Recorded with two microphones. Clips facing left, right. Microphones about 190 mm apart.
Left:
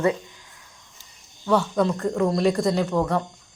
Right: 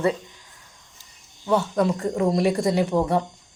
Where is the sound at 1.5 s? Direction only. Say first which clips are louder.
Even; 5° right (ahead or behind).